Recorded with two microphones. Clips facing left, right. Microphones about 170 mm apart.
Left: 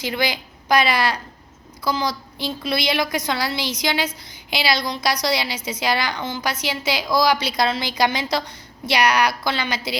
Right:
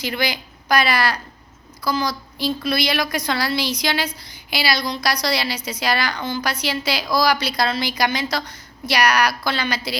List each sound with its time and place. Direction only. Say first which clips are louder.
0.0 s a woman's voice: left 1 dB; 20° left (ahead or behind)